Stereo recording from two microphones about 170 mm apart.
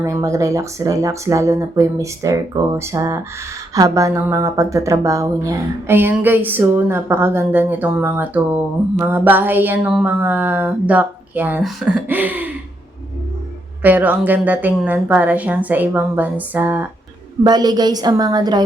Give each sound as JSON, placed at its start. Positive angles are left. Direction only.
{"t": 0.0, "sound": "speech", "side_deg": -20}
{"t": 13.8, "sound": "speech", "side_deg": -10}
{"t": 17.4, "sound": "a woman's voice", "side_deg": -25}